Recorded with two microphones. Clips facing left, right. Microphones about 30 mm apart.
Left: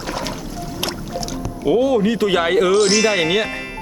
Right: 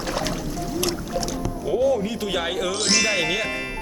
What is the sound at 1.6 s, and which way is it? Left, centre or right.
Speech, left.